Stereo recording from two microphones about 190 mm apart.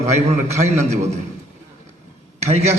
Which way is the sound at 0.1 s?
35° right (ahead or behind).